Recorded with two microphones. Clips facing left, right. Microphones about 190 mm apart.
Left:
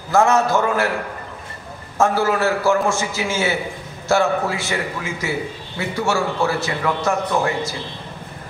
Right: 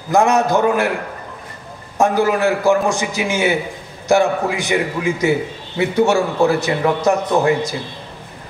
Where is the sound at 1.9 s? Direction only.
15° right (ahead or behind).